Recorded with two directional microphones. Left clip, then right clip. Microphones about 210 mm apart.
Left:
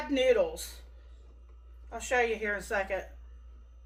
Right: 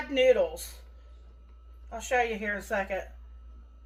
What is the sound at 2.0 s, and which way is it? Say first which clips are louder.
A woman's voice: right 1 dB; 25° left (ahead or behind).